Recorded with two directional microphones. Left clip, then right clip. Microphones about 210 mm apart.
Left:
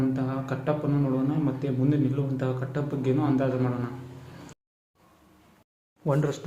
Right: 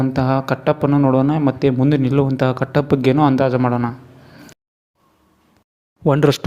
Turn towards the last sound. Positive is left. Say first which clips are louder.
# right 12 dB
turn(degrees=-45)  # may be behind; listen again after turning